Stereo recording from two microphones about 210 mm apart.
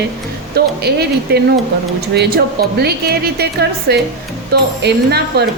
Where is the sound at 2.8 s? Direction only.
50° right (ahead or behind).